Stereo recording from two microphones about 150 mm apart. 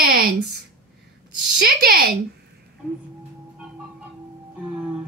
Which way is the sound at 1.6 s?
80° right.